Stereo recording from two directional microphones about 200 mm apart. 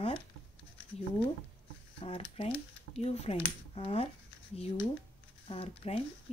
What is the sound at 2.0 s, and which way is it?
Speech, 30° left (ahead or behind).